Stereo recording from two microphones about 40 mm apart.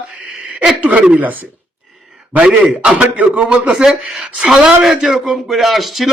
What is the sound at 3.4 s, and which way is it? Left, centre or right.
Speech, right.